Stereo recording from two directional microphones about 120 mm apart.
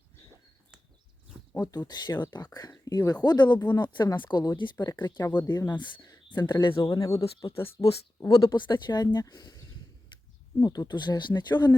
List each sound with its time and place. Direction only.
1.5 s speech: 30° left (ahead or behind)
6.8 s speech: 30° left (ahead or behind)
8.4 s speech: 40° left (ahead or behind)